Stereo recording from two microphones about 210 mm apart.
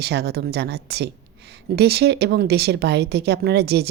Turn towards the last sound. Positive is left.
turn(degrees=-50)  # may be behind; listen again after turning